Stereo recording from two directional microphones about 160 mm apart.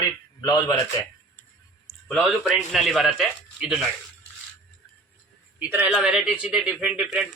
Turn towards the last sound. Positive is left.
turn(degrees=-5)  # may be behind; listen again after turning